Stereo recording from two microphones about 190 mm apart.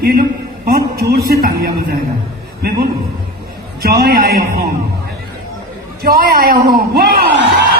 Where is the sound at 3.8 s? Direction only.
55° right (ahead or behind).